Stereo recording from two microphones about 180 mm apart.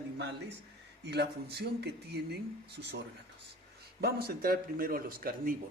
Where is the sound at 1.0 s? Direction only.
70° right (ahead or behind).